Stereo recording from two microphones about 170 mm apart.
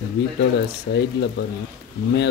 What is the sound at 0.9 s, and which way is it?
Speech, 85° left.